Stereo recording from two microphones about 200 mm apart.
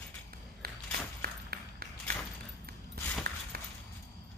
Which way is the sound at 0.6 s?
50° right (ahead or behind).